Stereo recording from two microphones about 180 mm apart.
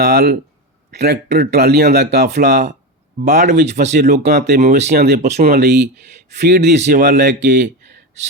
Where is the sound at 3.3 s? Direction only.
40° right (ahead or behind).